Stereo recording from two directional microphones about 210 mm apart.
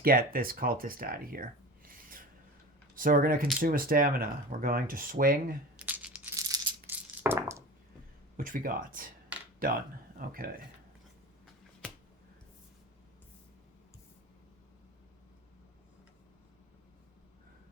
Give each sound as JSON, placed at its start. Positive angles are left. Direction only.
{"t": 0.0, "sound": "speech", "side_deg": -45}
{"t": 5.7, "sound": "crumpling", "side_deg": -5}
{"t": 6.3, "sound": "a sound", "side_deg": -15}
{"t": 8.4, "sound": "speech", "side_deg": -40}